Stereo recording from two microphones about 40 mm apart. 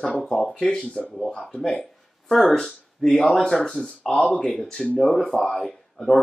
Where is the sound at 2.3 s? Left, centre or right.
Centre.